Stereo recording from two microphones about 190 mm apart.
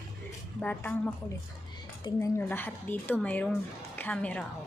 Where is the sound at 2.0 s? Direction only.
15° left (ahead or behind).